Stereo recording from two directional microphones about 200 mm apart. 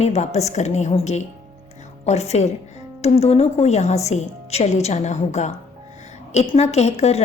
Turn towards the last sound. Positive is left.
turn(degrees=30)  # may be behind; listen again after turning